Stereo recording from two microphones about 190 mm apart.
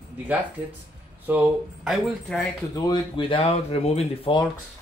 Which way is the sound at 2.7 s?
25° left (ahead or behind).